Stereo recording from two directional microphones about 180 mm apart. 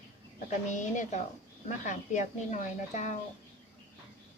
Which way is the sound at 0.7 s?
45° left (ahead or behind).